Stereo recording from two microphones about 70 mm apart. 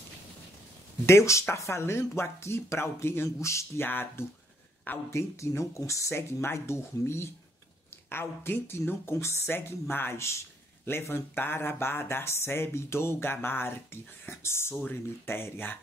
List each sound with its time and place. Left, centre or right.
1.0 s speech: left
3.8 s speech: left
5.1 s speech: left